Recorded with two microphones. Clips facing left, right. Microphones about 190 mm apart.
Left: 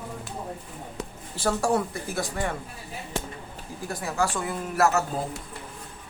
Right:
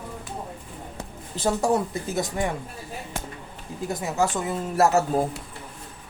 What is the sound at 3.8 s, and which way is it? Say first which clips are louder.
A woman's voice: right 3 dB; 20° right (ahead or behind).